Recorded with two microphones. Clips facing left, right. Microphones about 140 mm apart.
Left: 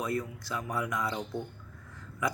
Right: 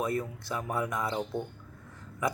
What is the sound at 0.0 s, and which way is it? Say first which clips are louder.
Speech: right 2 dB; 25° right (ahead or behind).